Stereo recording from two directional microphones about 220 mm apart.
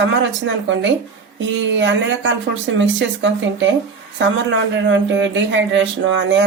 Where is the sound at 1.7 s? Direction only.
55° right (ahead or behind).